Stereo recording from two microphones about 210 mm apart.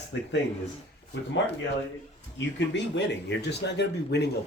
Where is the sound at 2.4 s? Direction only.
60° left (ahead or behind).